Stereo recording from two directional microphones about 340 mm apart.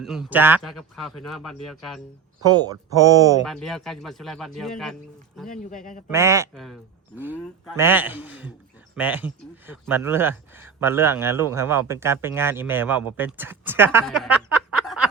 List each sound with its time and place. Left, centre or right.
0.0 s speech: centre
2.4 s speech: centre
3.4 s speech: centre
5.5 s speech: left
6.1 s speech: centre